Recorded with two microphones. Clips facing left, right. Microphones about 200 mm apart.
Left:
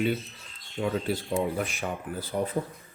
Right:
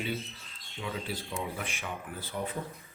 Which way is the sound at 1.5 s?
40° left (ahead or behind).